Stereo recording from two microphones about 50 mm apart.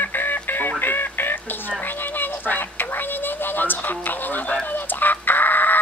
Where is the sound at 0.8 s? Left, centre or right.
Left.